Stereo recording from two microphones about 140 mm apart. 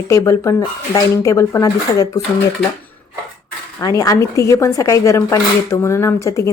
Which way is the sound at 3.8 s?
25° left (ahead or behind).